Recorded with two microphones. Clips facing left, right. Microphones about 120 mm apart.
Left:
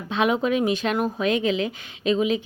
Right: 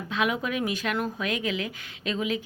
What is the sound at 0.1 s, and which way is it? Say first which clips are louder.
Speech: left 6 dB; 25° left (ahead or behind).